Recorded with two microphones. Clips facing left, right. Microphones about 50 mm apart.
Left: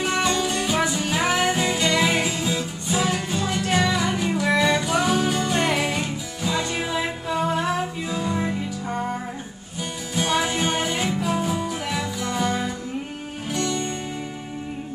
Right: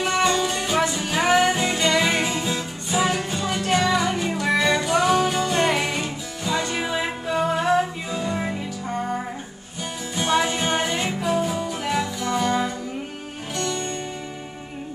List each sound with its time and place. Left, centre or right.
0.0 s music: centre
10.1 s music: centre